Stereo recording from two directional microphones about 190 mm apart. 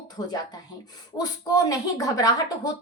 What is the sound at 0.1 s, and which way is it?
Speech, 20° left (ahead or behind).